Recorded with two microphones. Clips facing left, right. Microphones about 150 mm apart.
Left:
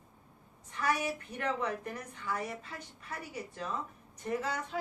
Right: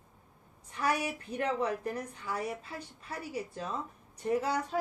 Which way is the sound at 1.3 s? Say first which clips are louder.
Right 5 dB; 35° right (ahead or behind).